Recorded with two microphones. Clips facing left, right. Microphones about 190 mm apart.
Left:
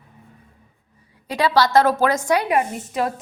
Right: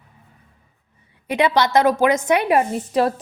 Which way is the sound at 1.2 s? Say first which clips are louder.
Right 1 dB; 20° right (ahead or behind).